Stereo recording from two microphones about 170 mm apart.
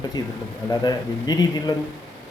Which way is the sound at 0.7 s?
25° left (ahead or behind).